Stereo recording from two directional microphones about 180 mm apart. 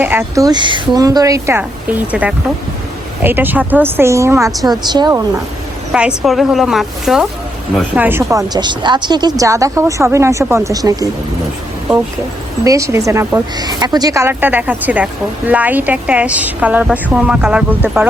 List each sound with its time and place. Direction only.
0.0 s a woman's voice: 10° right (ahead or behind)
5.9 s speech: 5° right (ahead or behind)
12.6 s a woman's voice: 15° right (ahead or behind)